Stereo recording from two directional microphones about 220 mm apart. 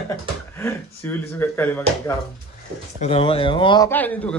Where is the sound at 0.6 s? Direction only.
10° left (ahead or behind).